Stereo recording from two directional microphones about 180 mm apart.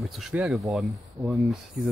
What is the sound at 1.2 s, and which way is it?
Speech, 15° right (ahead or behind).